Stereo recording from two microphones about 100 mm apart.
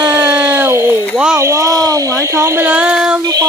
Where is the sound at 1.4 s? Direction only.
30° right (ahead or behind); by 3.2 s 10° right (ahead or behind).